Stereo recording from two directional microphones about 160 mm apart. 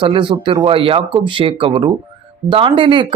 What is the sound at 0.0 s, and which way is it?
Speech, 30° right (ahead or behind).